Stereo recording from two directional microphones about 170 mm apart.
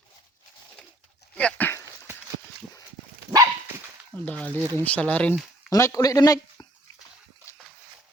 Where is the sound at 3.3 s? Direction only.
20° right (ahead or behind).